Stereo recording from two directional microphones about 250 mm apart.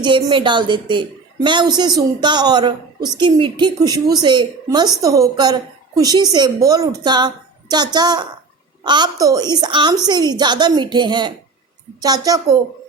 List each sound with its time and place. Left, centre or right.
0.0 s a woman's voice: centre